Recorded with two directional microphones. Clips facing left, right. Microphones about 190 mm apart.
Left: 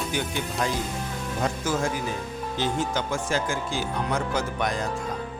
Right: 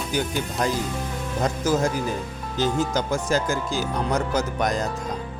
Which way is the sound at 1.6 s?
40° right (ahead or behind).